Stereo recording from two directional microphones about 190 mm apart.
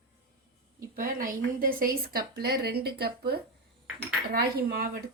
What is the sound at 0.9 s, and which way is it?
A woman's voice, 50° right (ahead or behind).